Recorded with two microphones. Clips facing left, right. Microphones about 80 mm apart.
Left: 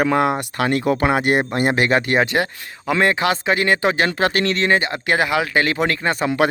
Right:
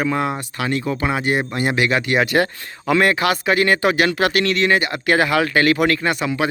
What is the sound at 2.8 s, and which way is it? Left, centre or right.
Speech, left.